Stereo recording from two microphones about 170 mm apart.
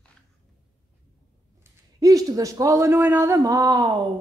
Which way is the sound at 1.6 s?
20° right (ahead or behind).